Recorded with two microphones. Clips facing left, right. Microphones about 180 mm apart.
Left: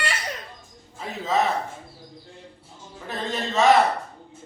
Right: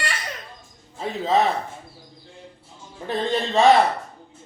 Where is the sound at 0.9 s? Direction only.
30° right (ahead or behind).